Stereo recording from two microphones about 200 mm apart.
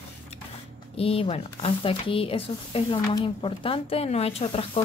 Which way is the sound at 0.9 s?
30° left (ahead or behind).